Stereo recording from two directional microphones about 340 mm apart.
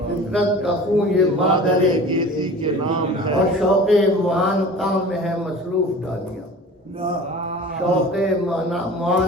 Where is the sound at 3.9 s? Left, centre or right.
Centre.